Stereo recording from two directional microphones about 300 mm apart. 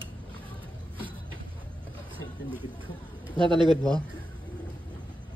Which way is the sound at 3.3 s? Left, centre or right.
Centre.